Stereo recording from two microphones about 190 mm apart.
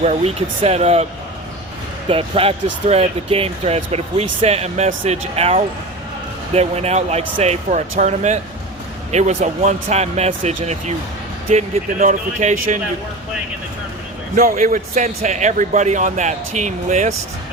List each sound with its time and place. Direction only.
0.6 s speech: 35° right (ahead or behind)
2.0 s speech: 30° right (ahead or behind)
14.3 s speech: 45° right (ahead or behind)